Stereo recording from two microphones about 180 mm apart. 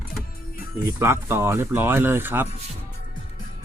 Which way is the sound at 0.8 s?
15° right (ahead or behind).